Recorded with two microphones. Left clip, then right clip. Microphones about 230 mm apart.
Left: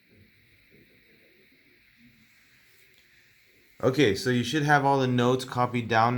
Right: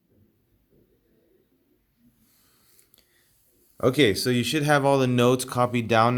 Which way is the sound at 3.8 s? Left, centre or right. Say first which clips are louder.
Right 3 dB; right.